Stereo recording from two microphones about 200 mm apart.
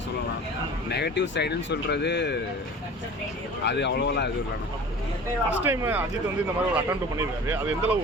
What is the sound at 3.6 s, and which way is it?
Speech, 60° left (ahead or behind).